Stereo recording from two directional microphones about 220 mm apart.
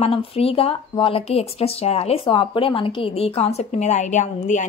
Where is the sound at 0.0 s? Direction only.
25° left (ahead or behind).